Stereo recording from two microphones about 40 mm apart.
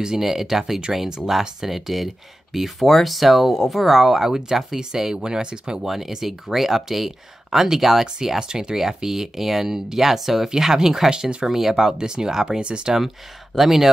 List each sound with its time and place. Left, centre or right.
0.2 s speech: centre
5.9 s speech: centre
11.1 s speech: right
11.4 s speech: centre
12.4 s speech: right
13.6 s speech: centre